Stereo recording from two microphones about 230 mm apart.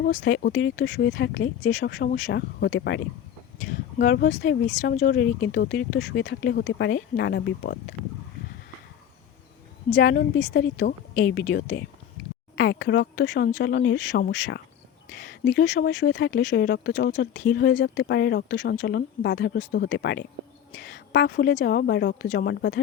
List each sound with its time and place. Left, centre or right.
0.0 s speech: left
10.0 s speech: left